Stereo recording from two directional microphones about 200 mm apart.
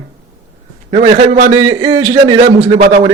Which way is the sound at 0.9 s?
40° right (ahead or behind).